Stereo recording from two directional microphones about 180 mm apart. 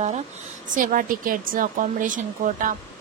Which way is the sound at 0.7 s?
50° right (ahead or behind).